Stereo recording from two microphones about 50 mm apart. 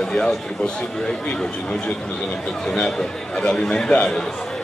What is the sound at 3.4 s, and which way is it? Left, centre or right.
Speech, centre.